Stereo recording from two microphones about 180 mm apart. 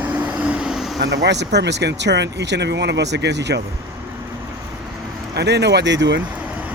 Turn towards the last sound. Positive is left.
turn(degrees=-80)